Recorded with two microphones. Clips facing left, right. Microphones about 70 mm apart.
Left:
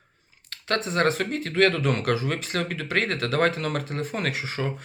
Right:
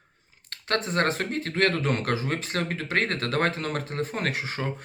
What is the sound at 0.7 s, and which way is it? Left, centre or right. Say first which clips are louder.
Speech: left 2 dB; right.